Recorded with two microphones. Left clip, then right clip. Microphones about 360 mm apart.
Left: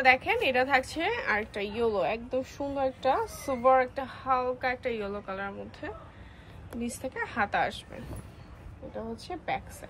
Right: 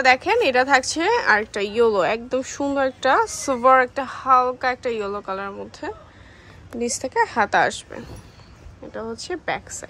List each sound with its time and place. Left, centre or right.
0.0 s speech: centre
9.1 s speech: centre